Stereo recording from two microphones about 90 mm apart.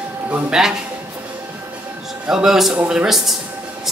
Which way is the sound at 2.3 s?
5° right (ahead or behind).